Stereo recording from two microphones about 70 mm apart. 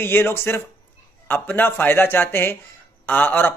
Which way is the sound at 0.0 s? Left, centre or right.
Left.